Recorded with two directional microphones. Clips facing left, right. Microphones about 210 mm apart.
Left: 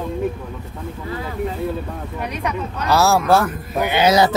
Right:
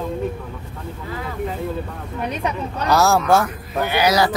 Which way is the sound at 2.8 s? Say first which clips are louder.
Even; centre (ahead or behind).